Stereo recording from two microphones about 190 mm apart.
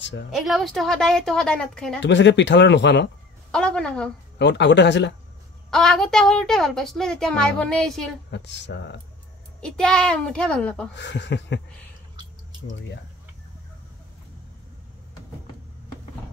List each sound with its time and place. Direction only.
0.3 s a woman's voice: centre (ahead or behind)
2.0 s speech: 70° left (ahead or behind)
3.5 s a woman's voice: 5° left (ahead or behind)
4.4 s speech: 70° left (ahead or behind)
5.7 s a woman's voice: 5° left (ahead or behind)
8.3 s speech: 65° left (ahead or behind)
9.6 s a woman's voice: 5° left (ahead or behind)
11.0 s speech: 70° left (ahead or behind)